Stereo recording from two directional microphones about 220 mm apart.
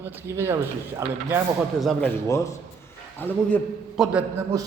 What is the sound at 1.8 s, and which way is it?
A man's voice, 5° left (ahead or behind).